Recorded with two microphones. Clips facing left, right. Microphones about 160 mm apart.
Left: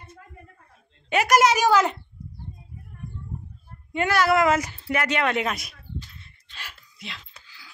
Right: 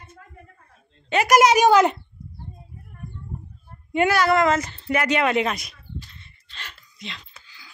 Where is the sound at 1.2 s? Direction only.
15° right (ahead or behind).